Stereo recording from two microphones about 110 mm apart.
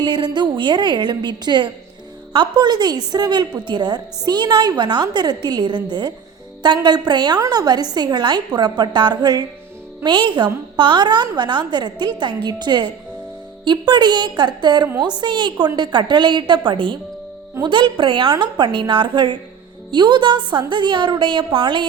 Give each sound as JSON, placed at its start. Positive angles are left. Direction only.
{"t": 0.0, "sound": "a woman's voice", "side_deg": -45}